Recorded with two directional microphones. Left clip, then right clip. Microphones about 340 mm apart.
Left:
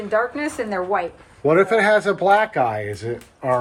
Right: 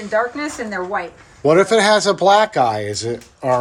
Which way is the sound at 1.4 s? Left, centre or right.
Centre.